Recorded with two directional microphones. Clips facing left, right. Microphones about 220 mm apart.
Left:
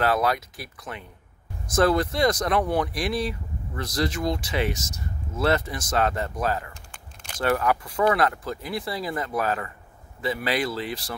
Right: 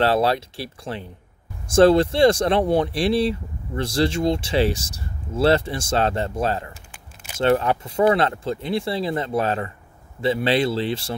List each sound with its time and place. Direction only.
0.0 s speech: 30° right (ahead or behind)
6.7 s a sound: 5° right (ahead or behind)
7.3 s speech: 25° right (ahead or behind)